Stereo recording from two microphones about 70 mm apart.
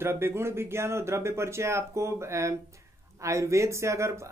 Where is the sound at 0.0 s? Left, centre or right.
Right.